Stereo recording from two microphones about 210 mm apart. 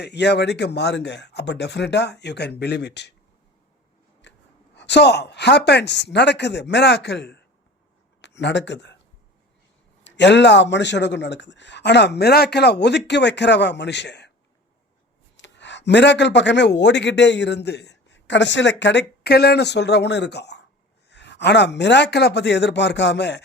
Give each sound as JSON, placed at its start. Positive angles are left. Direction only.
{"t": 0.0, "sound": "speech", "side_deg": 55}
{"t": 4.2, "sound": "speech", "side_deg": 55}
{"t": 10.0, "sound": "speech", "side_deg": 55}
{"t": 15.4, "sound": "speech", "side_deg": 55}